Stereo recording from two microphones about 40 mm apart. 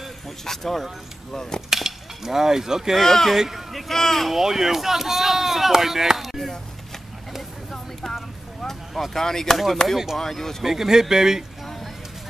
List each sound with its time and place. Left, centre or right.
0.5 s speech: centre
1.7 s a sound: centre
2.9 s speech: centre
3.3 s speech: centre
3.9 s speech: centre
4.3 s speech: centre
7.7 s a sound: centre
8.6 s speech: centre
10.6 s speech: centre